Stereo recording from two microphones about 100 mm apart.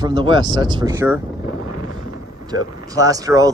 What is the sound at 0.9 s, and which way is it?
Speech, 25° right (ahead or behind).